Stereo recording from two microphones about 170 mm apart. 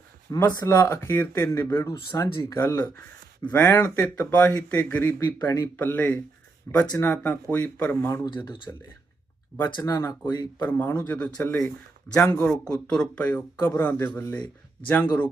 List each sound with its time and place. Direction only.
0.3 s speech: 20° left (ahead or behind)
10.6 s speech: 10° left (ahead or behind)
12.4 s speech: 5° left (ahead or behind)